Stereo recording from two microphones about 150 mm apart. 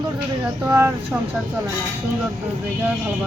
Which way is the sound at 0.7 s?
15° right (ahead or behind).